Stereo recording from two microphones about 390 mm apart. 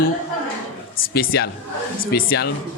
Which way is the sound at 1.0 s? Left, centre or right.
Left.